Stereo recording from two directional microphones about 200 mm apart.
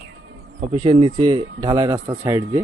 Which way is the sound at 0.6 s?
30° right (ahead or behind).